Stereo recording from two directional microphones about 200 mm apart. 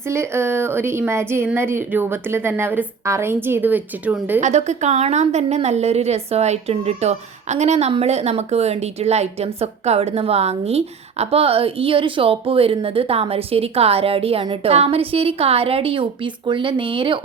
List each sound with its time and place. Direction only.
0.1 s a woman's voice: 15° right (ahead or behind)
4.4 s a woman's voice: 35° right (ahead or behind)